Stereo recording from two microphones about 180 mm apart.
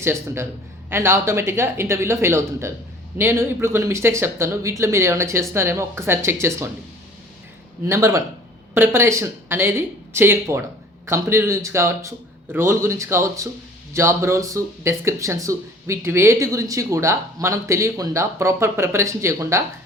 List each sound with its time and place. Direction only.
0.0 s speech: 15° right (ahead or behind)
7.9 s speech: 15° right (ahead or behind)